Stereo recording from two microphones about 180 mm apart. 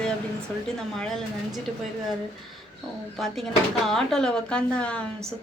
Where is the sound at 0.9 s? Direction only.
Centre (ahead or behind).